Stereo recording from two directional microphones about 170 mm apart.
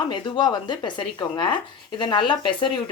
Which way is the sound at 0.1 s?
25° left (ahead or behind).